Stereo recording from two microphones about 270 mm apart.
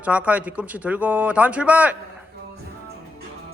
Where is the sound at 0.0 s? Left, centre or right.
Centre.